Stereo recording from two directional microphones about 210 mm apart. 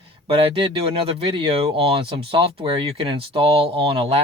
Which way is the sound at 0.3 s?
25° right (ahead or behind).